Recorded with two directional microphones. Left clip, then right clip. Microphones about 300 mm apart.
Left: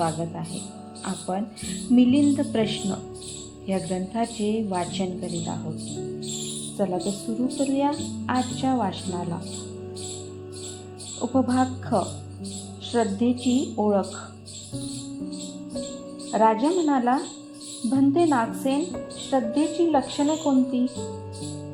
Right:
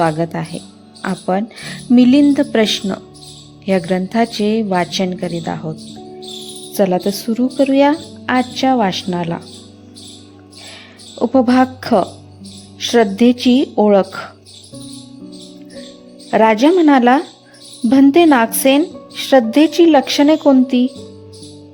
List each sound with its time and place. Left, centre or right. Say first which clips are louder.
0.0 s a woman's voice: right 11 dB; right
6.7 s a woman's voice: right 12 dB; right
11.2 s a woman's voice: right 11 dB; right
16.3 s a woman's voice: right 10 dB; right